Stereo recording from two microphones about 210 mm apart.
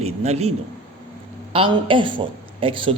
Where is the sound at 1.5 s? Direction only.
25° right (ahead or behind).